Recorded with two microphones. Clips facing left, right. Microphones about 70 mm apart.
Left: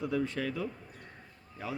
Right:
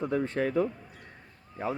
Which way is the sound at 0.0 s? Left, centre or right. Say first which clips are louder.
Right 4 dB; right.